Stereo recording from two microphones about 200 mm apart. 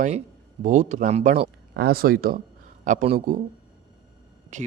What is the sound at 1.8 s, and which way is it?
A man's voice, 50° right (ahead or behind).